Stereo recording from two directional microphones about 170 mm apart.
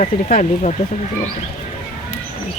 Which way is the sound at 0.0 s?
40° left (ahead or behind).